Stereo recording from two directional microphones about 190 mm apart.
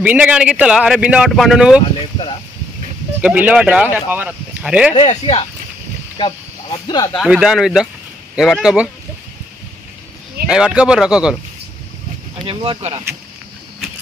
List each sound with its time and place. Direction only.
0.0 s speech: 5° right (ahead or behind)
3.2 s speech: 5° right (ahead or behind)
4.9 s speech: 30° left (ahead or behind)
7.2 s speech: centre (ahead or behind)
10.5 s speech: 5° right (ahead or behind)
12.4 s speech: 30° right (ahead or behind)